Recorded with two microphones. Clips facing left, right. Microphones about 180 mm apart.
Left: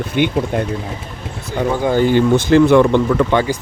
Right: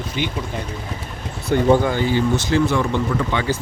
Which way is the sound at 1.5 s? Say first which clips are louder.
Right 2 dB; 65° right (ahead or behind).